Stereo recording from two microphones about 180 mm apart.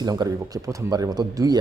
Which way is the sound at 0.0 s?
20° right (ahead or behind).